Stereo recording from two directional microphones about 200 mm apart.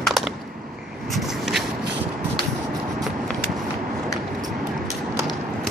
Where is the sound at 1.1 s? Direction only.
Centre (ahead or behind).